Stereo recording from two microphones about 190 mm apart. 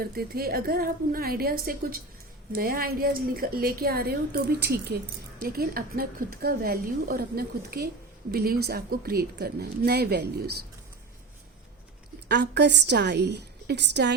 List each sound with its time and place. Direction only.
0.0 s a woman's voice: 55° right (ahead or behind)
12.3 s speech: 60° right (ahead or behind)